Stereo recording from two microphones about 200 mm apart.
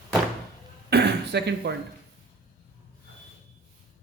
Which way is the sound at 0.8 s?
55° right (ahead or behind).